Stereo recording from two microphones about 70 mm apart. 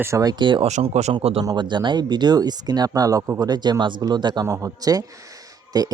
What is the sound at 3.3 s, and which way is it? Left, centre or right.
Speech, right.